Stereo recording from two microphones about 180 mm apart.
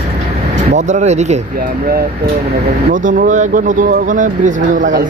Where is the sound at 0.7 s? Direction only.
40° right (ahead or behind).